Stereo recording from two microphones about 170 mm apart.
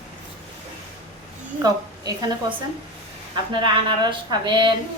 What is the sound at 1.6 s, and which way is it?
A woman's voice, 25° right (ahead or behind).